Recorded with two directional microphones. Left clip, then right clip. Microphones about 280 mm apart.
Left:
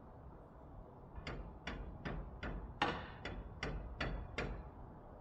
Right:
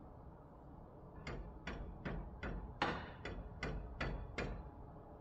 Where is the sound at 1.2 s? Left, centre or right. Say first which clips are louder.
Left 1 dB; left.